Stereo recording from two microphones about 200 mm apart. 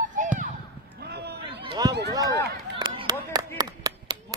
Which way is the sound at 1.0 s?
55° right (ahead or behind).